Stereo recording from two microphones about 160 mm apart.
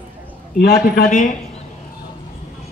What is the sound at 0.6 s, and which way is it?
Speech, 70° left (ahead or behind).